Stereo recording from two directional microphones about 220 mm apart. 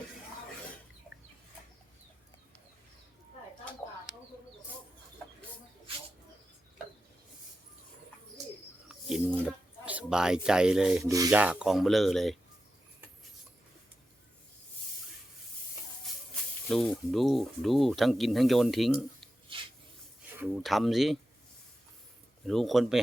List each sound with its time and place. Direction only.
8.9 s speech: centre (ahead or behind)
16.6 s speech: centre (ahead or behind)
19.5 s rub: 25° right (ahead or behind)
20.4 s speech: centre (ahead or behind)
22.4 s speech: centre (ahead or behind)